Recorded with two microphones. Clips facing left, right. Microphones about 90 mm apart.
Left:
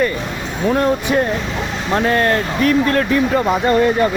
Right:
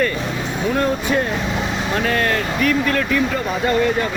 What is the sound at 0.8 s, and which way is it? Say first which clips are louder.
Speech: left 2 dB; 20° left (ahead or behind).